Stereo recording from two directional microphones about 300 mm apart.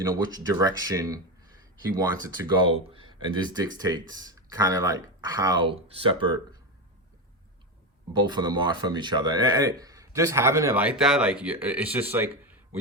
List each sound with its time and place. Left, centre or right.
0.1 s speech: centre
2.5 s speech: centre
8.3 s speech: centre